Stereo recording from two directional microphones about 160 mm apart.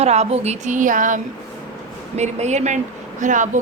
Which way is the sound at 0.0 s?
40° right (ahead or behind).